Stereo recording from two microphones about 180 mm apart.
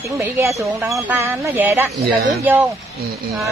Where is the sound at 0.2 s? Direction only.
15° right (ahead or behind).